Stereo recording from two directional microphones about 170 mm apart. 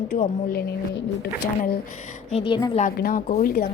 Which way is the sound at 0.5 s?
70° left (ahead or behind).